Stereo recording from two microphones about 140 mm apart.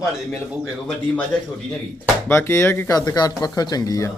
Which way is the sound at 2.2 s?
20° left (ahead or behind).